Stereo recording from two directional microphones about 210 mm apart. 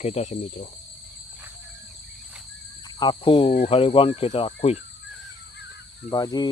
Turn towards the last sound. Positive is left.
turn(degrees=20)  # may be behind; listen again after turning